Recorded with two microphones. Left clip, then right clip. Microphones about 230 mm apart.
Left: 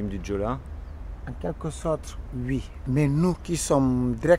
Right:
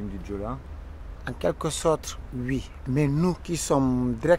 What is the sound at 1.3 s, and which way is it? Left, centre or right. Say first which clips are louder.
Speech: right 6 dB; right.